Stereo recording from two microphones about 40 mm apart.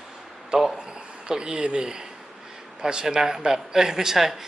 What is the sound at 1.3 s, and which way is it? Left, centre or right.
A man's voice, right.